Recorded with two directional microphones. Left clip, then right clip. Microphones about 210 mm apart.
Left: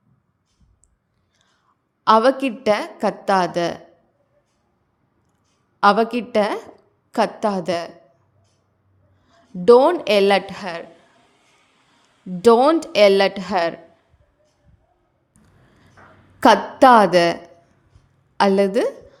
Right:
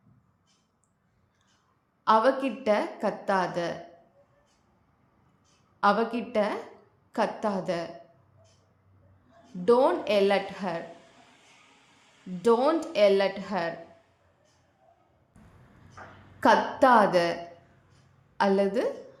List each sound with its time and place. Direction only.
2.0 s a woman's voice: 45° left (ahead or behind)
5.8 s a woman's voice: 45° left (ahead or behind)
9.3 s a woman's voice: 45° left (ahead or behind)
12.4 s a woman's voice: 45° left (ahead or behind)
16.4 s a woman's voice: 45° left (ahead or behind)
18.3 s a woman's voice: 40° left (ahead or behind)